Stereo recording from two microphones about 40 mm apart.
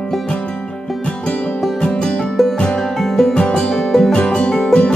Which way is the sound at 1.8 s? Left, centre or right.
Left.